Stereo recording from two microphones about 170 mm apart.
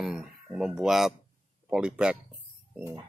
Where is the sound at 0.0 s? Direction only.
5° right (ahead or behind).